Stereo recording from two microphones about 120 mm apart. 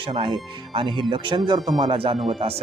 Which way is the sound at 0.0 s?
45° right (ahead or behind).